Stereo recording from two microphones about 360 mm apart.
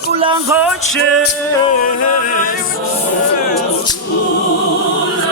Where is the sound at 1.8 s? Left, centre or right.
Left.